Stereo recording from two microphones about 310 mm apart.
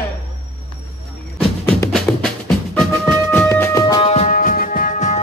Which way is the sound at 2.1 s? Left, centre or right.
Centre.